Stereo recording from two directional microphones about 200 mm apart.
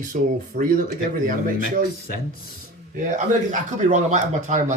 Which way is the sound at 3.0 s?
35° right (ahead or behind).